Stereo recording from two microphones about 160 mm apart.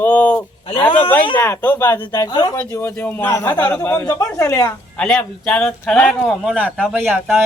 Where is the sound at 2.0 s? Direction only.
25° left (ahead or behind).